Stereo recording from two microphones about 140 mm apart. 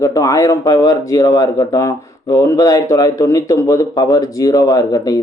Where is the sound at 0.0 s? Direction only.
25° left (ahead or behind).